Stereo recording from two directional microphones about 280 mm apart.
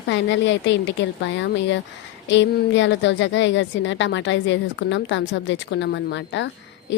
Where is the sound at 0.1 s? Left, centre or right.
Left.